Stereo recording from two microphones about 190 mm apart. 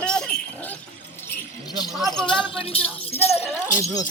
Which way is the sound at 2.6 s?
30° left (ahead or behind).